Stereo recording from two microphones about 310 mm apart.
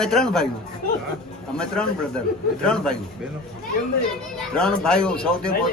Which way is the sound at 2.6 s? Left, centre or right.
Centre.